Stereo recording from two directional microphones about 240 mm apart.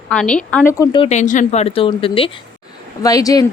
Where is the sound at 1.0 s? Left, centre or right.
Left.